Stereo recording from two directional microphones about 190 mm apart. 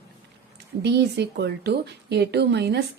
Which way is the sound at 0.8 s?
60° right (ahead or behind).